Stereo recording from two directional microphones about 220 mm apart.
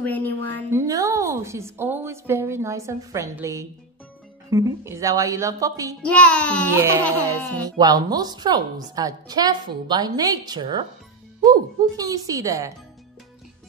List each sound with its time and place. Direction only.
0.0 s a woman's voice: 10° left (ahead or behind)
0.7 s a woman's voice: 15° right (ahead or behind)
6.0 s a child's voice: 5° left (ahead or behind)
6.7 s a woman's voice: 10° right (ahead or behind)